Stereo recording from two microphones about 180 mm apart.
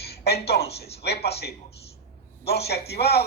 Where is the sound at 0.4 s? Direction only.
65° left (ahead or behind).